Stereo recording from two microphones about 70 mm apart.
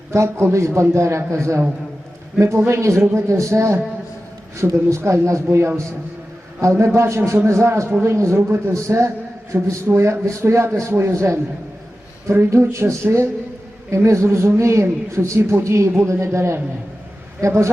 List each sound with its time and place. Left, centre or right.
0.1 s a man's voice: right
2.6 s a man's voice: right